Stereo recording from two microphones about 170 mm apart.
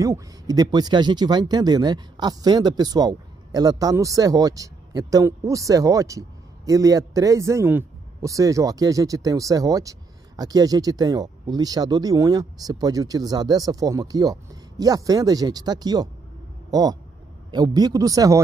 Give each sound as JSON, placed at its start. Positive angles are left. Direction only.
{"t": 0.0, "sound": "speech", "side_deg": -20}